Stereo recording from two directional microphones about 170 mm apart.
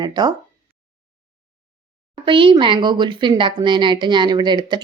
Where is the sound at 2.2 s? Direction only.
30° right (ahead or behind).